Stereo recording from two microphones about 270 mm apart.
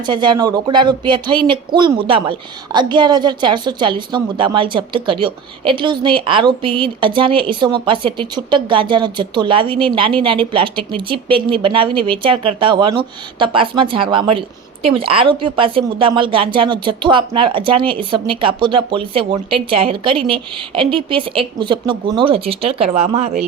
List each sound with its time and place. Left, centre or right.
0.0 s a woman's voice: centre